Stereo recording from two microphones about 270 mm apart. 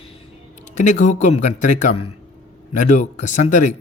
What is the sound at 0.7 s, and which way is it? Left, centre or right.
Speech, left.